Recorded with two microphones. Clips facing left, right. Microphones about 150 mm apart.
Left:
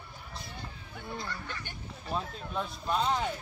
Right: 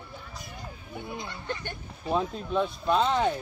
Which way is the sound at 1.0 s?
20° right (ahead or behind).